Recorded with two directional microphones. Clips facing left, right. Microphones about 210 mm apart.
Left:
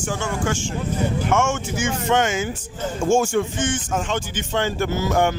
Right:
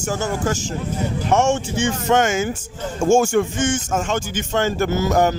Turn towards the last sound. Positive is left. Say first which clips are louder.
# right 2 dB
turn(degrees=-40)  # may be behind; listen again after turning